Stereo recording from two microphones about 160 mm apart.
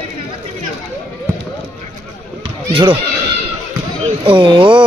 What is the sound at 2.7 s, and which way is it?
Speech, 30° right (ahead or behind).